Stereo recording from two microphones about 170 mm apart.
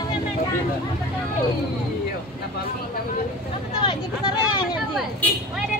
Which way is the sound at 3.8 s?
30° left (ahead or behind).